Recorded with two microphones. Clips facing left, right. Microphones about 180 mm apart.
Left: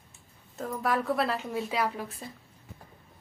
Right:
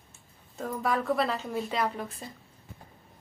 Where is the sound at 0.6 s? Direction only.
Centre (ahead or behind).